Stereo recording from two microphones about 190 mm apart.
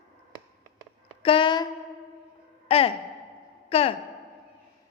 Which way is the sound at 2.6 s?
30° left (ahead or behind).